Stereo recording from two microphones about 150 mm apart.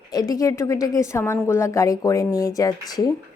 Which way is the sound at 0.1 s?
25° left (ahead or behind).